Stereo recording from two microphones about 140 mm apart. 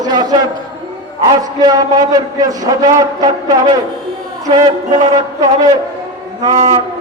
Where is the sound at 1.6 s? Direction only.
25° right (ahead or behind).